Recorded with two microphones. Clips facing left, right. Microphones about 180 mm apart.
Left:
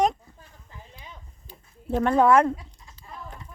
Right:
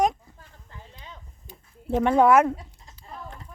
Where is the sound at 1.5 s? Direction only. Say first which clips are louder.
Right 1 dB; 10° right (ahead or behind).